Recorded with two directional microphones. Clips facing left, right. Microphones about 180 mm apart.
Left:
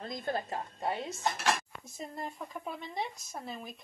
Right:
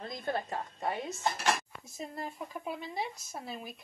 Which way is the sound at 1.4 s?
Centre (ahead or behind).